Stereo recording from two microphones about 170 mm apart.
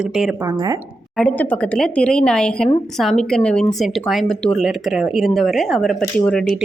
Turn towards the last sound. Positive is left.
turn(degrees=5)  # may be behind; listen again after turning